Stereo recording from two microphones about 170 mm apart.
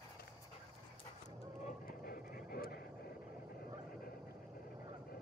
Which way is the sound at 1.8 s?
60° left (ahead or behind).